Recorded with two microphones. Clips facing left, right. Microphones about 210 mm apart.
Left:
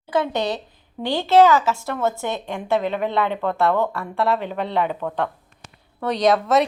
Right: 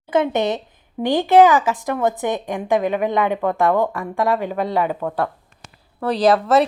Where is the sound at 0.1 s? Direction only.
20° right (ahead or behind).